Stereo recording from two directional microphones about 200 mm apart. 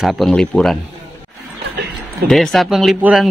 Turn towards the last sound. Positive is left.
turn(degrees=-5)  # may be behind; listen again after turning